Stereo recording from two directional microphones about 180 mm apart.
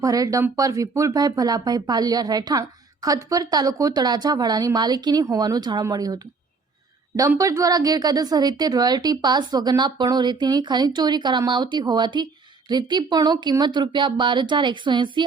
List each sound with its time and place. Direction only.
0.0 s a woman's voice: 20° right (ahead or behind)